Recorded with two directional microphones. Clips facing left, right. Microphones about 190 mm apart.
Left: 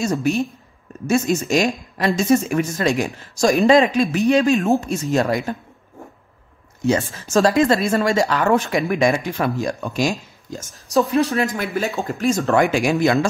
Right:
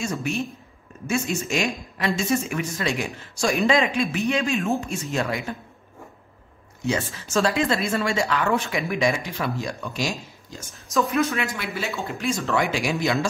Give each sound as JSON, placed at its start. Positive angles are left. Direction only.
{"t": 0.0, "sound": "speech", "side_deg": 40}
{"t": 6.9, "sound": "speech", "side_deg": 45}
{"t": 10.7, "sound": "speech", "side_deg": 35}
{"t": 11.5, "sound": "speech", "side_deg": 45}